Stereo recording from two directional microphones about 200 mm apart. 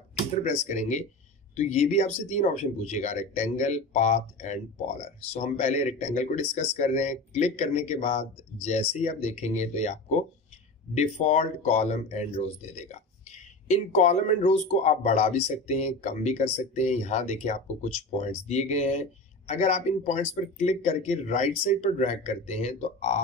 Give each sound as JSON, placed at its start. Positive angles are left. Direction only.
{"t": 0.3, "sound": "speech", "side_deg": 35}